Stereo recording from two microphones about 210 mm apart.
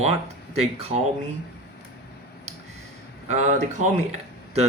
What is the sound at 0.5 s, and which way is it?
Speech, 30° right (ahead or behind).